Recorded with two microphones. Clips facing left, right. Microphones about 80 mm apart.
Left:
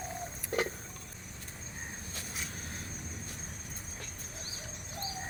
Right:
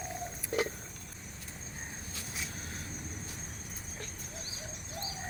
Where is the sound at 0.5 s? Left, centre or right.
Left.